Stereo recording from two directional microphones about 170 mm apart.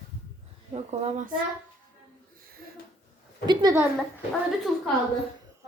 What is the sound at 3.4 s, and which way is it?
Speech, 25° right (ahead or behind).